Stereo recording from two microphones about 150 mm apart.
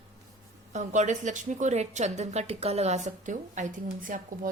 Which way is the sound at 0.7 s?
55° right (ahead or behind).